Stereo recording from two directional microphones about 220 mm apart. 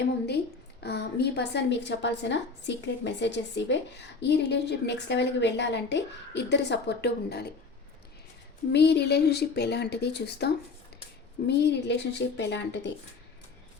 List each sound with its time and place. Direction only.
0.8 s a woman's voice: 50° left (ahead or behind)
8.7 s a woman's voice: 50° left (ahead or behind)